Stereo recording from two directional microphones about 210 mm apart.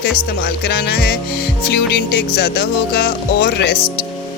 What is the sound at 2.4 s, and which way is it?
Speech, 50° left (ahead or behind).